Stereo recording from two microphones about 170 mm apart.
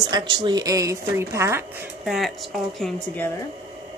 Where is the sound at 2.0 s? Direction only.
Centre (ahead or behind).